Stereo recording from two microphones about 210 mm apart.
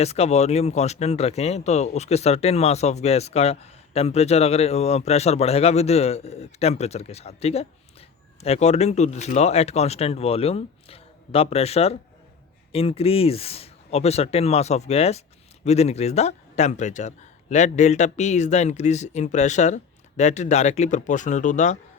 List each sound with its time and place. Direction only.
0.0 s speech: 30° left (ahead or behind)